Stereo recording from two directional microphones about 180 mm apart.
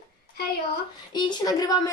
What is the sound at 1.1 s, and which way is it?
Speech, 25° left (ahead or behind).